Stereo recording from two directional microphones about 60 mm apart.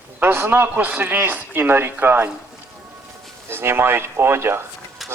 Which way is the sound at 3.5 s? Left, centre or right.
Right.